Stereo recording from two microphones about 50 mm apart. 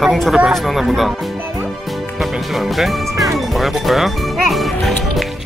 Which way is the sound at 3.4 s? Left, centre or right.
Centre.